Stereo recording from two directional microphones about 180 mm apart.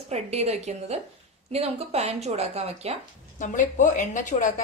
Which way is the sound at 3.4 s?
45° left (ahead or behind).